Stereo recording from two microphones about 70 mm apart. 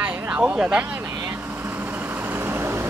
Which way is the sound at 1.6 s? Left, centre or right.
Right.